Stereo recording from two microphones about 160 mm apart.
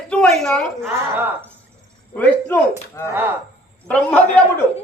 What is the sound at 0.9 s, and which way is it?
Speech, 15° right (ahead or behind).